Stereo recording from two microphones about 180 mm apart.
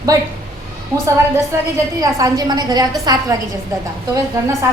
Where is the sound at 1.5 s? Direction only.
15° right (ahead or behind).